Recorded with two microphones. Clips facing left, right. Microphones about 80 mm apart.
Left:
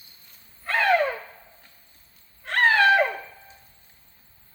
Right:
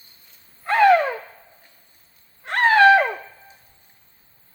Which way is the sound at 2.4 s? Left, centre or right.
Centre.